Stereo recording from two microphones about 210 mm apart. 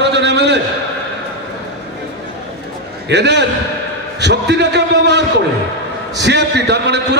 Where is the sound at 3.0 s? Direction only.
55° right (ahead or behind).